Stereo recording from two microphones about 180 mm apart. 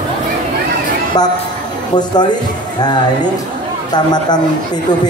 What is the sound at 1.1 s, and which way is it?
A man's voice, 20° left (ahead or behind).